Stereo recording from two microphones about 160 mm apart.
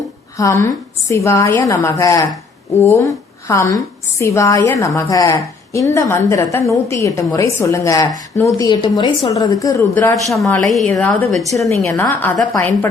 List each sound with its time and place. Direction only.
0.3 s a woman's voice: 20° left (ahead or behind)
10.2 s a woman's voice: centre (ahead or behind)